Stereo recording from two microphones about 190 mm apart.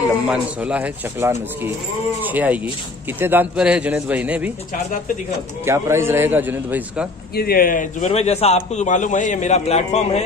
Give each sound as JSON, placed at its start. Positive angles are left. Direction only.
{"t": 0.3, "sound": "speech", "side_deg": -5}
{"t": 5.7, "sound": "speech", "side_deg": -15}
{"t": 7.3, "sound": "a man's voice", "side_deg": 50}